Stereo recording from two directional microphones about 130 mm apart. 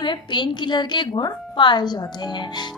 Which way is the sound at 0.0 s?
35° left (ahead or behind).